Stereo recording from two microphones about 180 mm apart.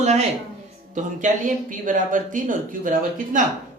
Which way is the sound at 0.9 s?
45° right (ahead or behind).